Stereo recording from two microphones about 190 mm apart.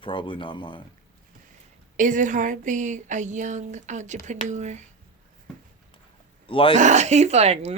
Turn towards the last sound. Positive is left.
turn(degrees=-35)  # may be behind; listen again after turning